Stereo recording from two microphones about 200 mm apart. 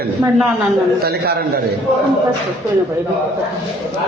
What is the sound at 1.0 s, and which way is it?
Speech, 50° right (ahead or behind).